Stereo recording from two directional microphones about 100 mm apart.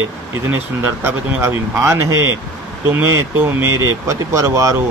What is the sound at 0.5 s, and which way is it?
Speech, 20° right (ahead or behind).